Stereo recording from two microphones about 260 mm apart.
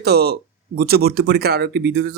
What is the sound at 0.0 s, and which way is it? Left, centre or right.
Speech, right.